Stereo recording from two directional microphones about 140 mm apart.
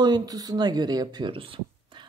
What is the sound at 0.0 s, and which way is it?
Speech, 30° right (ahead or behind).